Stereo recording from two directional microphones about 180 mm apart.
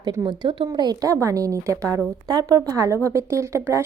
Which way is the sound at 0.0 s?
20° right (ahead or behind).